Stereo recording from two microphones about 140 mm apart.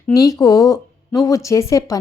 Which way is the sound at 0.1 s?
25° left (ahead or behind).